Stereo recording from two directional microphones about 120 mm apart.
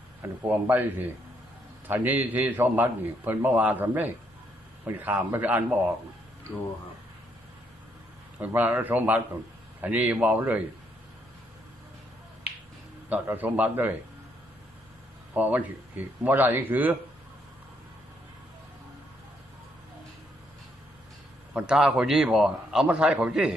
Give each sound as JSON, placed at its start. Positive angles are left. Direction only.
{"t": 0.2, "sound": "a man's voice", "side_deg": -15}
{"t": 8.4, "sound": "a man's voice", "side_deg": -15}
{"t": 13.1, "sound": "a man's voice", "side_deg": -15}
{"t": 15.3, "sound": "a man's voice", "side_deg": -10}
{"t": 21.5, "sound": "a man's voice", "side_deg": -5}